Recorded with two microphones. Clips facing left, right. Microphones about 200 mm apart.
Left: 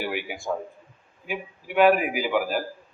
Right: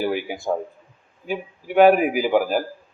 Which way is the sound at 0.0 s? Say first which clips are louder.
Right 6 dB; 35° right (ahead or behind).